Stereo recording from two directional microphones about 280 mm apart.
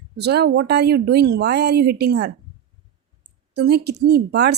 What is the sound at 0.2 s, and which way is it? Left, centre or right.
A woman's voice, right.